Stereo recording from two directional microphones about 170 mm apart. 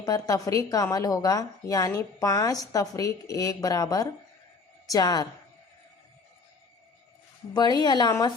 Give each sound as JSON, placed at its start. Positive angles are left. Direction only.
{"t": 0.0, "sound": "a woman's voice", "side_deg": 20}
{"t": 7.5, "sound": "a woman's voice", "side_deg": 25}